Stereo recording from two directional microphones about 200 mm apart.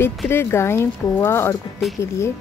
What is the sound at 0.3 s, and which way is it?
A woman's voice, 10° left (ahead or behind).